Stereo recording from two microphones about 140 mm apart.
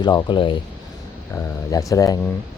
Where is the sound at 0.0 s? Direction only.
30° left (ahead or behind).